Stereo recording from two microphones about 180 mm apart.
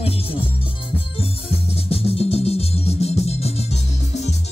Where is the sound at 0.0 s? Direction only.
30° left (ahead or behind).